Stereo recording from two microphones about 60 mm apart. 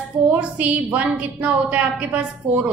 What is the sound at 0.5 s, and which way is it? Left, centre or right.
A woman's voice, right.